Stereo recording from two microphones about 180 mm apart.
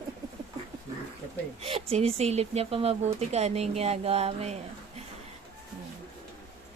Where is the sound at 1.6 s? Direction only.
35° right (ahead or behind).